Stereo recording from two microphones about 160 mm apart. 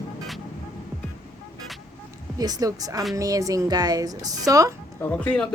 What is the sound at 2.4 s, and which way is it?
Speech, 25° right (ahead or behind).